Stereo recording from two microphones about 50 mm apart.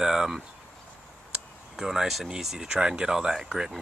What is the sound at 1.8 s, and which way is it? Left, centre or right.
Speech, centre.